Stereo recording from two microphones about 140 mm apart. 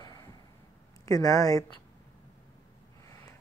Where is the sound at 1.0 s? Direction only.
25° left (ahead or behind).